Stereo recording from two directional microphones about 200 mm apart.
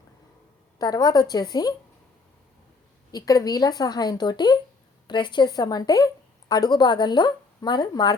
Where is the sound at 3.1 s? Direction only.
20° left (ahead or behind).